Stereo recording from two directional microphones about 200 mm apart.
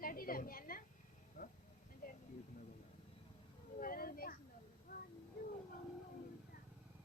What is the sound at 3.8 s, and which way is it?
Speech, 45° left (ahead or behind).